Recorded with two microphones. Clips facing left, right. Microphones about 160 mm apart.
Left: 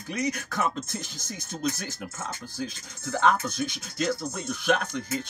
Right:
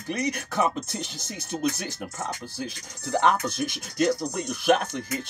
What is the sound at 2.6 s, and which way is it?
Speech, 15° right (ahead or behind).